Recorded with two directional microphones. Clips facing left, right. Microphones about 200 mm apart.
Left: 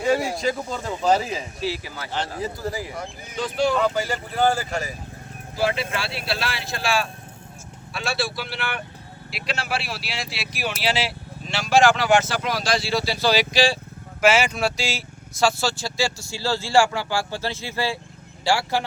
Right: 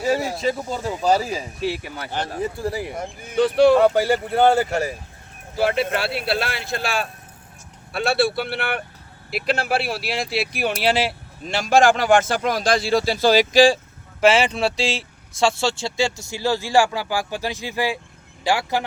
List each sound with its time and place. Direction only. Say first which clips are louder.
0.3 s speech: right 2 dB; 5° right (ahead or behind)
1.2 s speech: right 2 dB; 35° right (ahead or behind)
1.6 s speech: right 3 dB; 55° right (ahead or behind)
3.3 s speech: right 8 dB; 60° right (ahead or behind)
14.2 s speech: right 2 dB; 30° right (ahead or behind)